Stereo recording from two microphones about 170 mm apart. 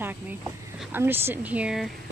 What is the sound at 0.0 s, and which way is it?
Speech, 10° right (ahead or behind).